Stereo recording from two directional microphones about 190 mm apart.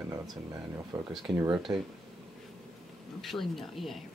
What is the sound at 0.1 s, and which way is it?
Speech, 15° right (ahead or behind).